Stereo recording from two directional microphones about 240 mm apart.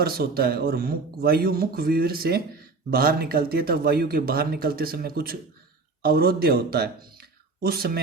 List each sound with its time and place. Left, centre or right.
0.0 s speech: right